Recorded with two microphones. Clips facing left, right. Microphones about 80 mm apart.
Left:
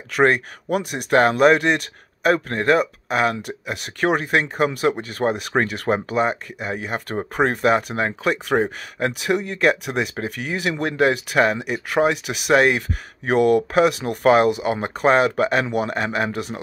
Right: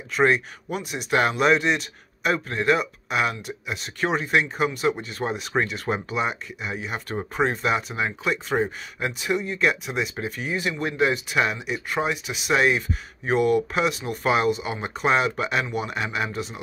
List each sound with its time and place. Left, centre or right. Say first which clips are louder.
0.1 s speech: left 3 dB; left